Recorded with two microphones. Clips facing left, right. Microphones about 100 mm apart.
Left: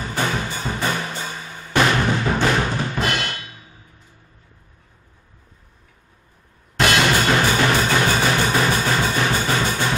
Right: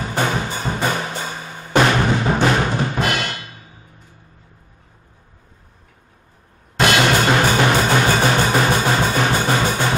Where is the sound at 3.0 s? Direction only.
10° right (ahead or behind).